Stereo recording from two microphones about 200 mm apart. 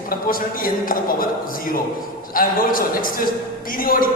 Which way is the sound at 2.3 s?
45° left (ahead or behind).